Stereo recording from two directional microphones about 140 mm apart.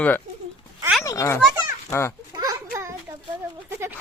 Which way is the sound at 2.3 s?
25° right (ahead or behind).